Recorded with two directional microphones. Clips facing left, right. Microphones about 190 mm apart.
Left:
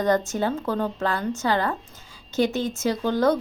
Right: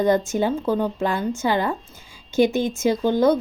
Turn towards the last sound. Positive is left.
turn(degrees=-15)  # may be behind; listen again after turning